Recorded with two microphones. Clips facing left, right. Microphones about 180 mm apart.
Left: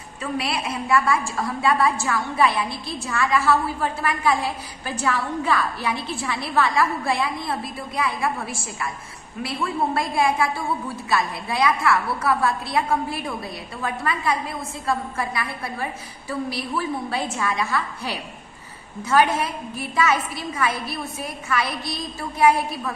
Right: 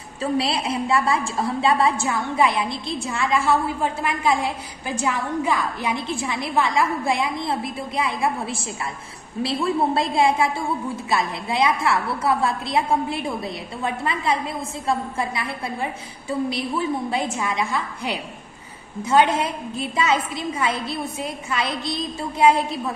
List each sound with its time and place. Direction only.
0.2 s a woman's voice: 30° right (ahead or behind)